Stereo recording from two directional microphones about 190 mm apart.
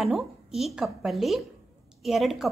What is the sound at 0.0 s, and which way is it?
A woman's voice, centre (ahead or behind).